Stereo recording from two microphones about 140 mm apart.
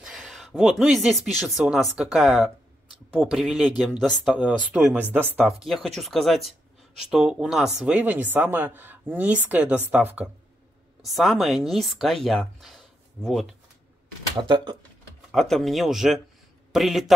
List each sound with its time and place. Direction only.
0.0 s speech: centre (ahead or behind)
11.0 s speech: centre (ahead or behind)
14.5 s speech: 35° right (ahead or behind)
15.3 s speech: centre (ahead or behind)